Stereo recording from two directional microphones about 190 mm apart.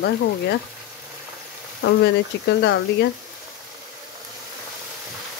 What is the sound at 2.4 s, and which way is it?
Speech, 70° left (ahead or behind).